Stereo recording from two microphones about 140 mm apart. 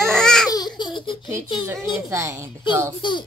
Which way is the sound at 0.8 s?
35° left (ahead or behind).